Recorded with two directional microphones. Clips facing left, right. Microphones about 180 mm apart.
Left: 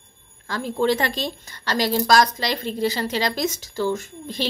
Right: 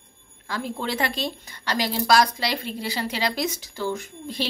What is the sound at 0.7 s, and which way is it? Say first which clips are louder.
A woman's voice: left 8 dB; 5° right (ahead or behind).